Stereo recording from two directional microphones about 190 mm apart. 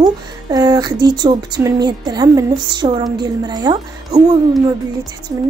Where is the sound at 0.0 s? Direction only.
20° right (ahead or behind).